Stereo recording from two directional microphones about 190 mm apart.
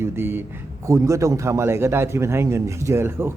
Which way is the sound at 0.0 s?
10° right (ahead or behind).